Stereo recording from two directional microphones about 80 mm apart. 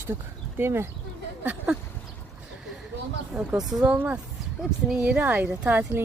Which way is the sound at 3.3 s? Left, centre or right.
Right.